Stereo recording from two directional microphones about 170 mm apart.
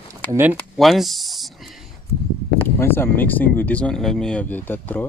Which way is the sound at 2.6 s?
15° left (ahead or behind).